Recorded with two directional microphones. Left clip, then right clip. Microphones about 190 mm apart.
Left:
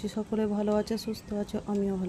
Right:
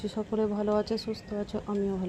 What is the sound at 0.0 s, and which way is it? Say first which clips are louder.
Speech: right 1 dB; 20° left (ahead or behind).